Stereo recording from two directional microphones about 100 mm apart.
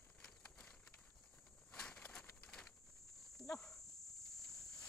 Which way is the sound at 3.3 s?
5° left (ahead or behind).